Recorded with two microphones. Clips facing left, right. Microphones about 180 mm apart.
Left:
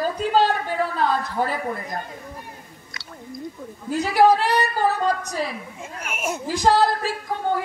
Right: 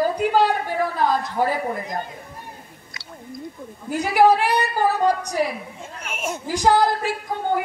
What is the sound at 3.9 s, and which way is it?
A woman's voice, 15° right (ahead or behind).